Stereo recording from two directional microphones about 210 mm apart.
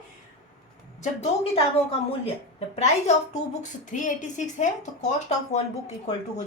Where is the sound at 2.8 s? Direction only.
30° left (ahead or behind).